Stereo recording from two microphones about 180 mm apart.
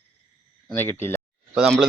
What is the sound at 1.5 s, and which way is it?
Speech, 5° right (ahead or behind).